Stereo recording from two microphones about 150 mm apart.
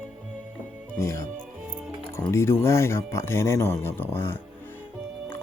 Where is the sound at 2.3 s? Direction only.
20° left (ahead or behind).